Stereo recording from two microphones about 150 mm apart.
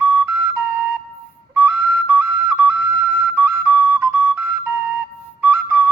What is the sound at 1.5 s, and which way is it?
Whistle, 10° right (ahead or behind).